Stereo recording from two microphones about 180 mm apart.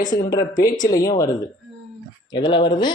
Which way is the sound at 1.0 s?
20° left (ahead or behind).